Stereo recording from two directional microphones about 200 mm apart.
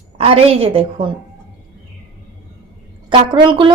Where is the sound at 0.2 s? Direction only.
30° right (ahead or behind).